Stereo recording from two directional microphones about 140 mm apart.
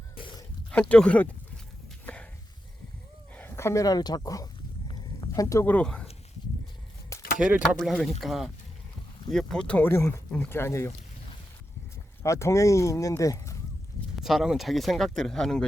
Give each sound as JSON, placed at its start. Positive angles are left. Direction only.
{"t": 0.7, "sound": "speech", "side_deg": 10}
{"t": 3.3, "sound": "speech", "side_deg": 15}
{"t": 4.9, "sound": "a sound", "side_deg": 30}
{"t": 5.6, "sound": "speech", "side_deg": 10}
{"t": 7.3, "sound": "speech", "side_deg": -10}
{"t": 7.8, "sound": "speech", "side_deg": 0}
{"t": 12.2, "sound": "speech", "side_deg": 20}
{"t": 14.2, "sound": "speech", "side_deg": 0}